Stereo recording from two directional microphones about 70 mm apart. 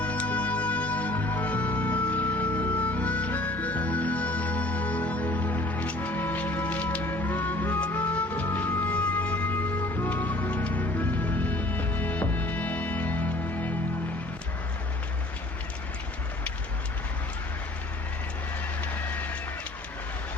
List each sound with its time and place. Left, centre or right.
0.0 s music: centre
18.8 s vehicle: left